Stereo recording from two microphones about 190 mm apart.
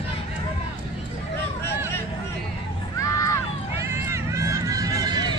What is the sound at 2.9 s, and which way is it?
Run, 15° left (ahead or behind).